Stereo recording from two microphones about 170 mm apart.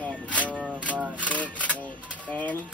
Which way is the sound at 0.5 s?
Centre (ahead or behind).